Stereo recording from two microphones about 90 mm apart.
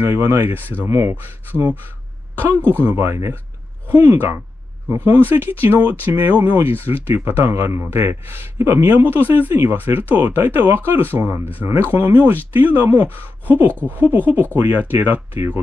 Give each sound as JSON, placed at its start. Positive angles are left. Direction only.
{"t": 0.0, "sound": "speech", "side_deg": -25}
{"t": 2.8, "sound": "speech", "side_deg": -25}